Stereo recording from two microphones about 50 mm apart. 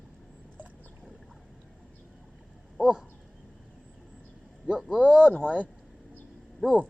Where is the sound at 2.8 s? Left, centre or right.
Centre.